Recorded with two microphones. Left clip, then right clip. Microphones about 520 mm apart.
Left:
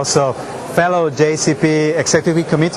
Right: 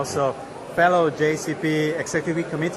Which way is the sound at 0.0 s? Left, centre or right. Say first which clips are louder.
Left 8 dB; left.